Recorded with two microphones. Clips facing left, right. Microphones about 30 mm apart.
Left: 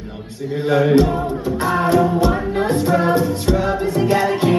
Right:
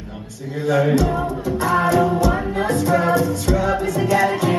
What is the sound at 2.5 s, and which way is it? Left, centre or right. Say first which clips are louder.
Music: left 1 dB; left.